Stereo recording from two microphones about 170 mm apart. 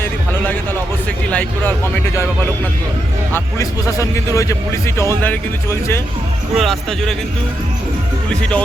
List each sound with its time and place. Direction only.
1.3 s a man's voice: 10° left (ahead or behind)
3.3 s a man's voice: 20° left (ahead or behind)
6.6 s speech: centre (ahead or behind)
8.3 s a man's voice: 5° left (ahead or behind)